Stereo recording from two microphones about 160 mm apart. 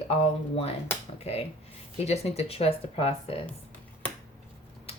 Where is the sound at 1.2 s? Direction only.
40° left (ahead or behind).